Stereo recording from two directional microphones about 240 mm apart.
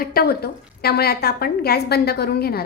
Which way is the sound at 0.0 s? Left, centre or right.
Left.